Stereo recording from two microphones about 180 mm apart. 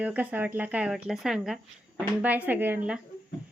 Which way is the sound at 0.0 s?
10° right (ahead or behind).